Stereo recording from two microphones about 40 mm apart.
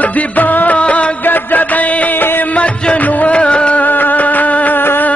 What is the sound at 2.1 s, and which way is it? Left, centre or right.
Music, left.